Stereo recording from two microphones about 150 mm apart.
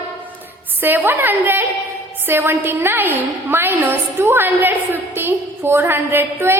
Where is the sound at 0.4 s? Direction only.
15° right (ahead or behind).